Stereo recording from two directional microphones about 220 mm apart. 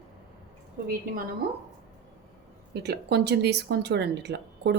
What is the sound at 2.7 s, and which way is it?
Speech, 50° right (ahead or behind).